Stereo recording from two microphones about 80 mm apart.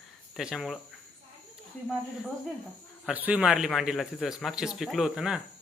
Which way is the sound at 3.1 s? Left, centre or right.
Centre.